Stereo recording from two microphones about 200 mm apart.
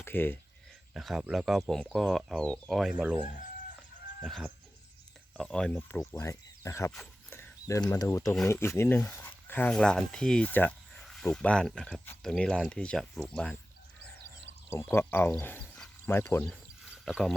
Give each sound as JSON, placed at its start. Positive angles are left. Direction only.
{"t": 0.0, "sound": "speech", "side_deg": 10}
{"t": 0.9, "sound": "speech", "side_deg": 0}
{"t": 4.2, "sound": "chicken", "side_deg": 0}
{"t": 5.4, "sound": "speech", "side_deg": 5}
{"t": 6.9, "sound": "a sound", "side_deg": 5}
{"t": 7.9, "sound": "speech", "side_deg": 15}
{"t": 14.7, "sound": "speech", "side_deg": 10}
{"t": 16.9, "sound": "a sound", "side_deg": 0}